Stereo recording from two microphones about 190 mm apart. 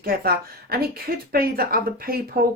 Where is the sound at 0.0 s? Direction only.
50° right (ahead or behind).